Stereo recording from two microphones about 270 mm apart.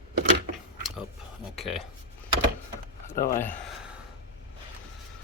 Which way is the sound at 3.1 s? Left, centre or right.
Left.